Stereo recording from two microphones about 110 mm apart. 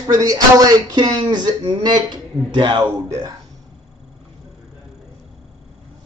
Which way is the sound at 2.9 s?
30° right (ahead or behind).